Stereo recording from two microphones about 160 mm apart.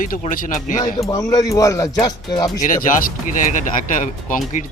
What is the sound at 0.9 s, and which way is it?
Speech, 20° left (ahead or behind).